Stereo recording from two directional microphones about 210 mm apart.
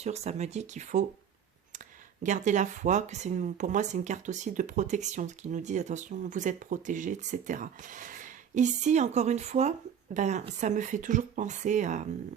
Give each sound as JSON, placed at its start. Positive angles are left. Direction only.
{"t": 0.0, "sound": "speech", "side_deg": -30}
{"t": 2.2, "sound": "speech", "side_deg": -35}